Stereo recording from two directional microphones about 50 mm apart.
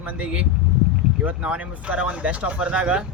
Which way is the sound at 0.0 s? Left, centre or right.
Right.